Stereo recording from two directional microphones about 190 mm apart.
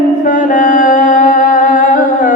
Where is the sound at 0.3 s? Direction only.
45° left (ahead or behind).